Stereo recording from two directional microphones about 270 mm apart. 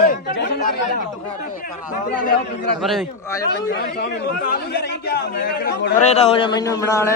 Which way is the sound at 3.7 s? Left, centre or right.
Left.